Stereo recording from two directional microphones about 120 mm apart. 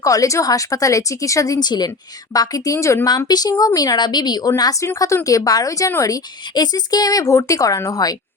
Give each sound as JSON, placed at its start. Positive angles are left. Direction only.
{"t": 0.0, "sound": "speech", "side_deg": 30}